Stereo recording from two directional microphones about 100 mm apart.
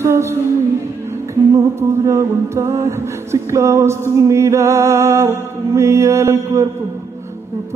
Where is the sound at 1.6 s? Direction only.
30° right (ahead or behind).